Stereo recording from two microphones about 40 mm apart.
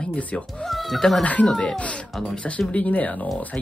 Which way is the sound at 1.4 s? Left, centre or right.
Centre.